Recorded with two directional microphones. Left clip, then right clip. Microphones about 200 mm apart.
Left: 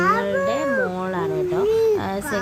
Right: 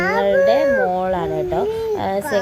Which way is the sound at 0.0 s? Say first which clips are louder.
Right 4 dB; 15° right (ahead or behind).